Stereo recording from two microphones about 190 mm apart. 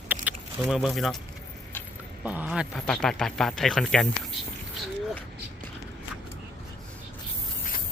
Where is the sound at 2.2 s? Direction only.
10° right (ahead or behind).